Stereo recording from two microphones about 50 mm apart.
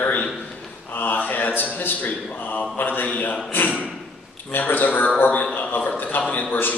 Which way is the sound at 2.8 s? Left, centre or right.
Left.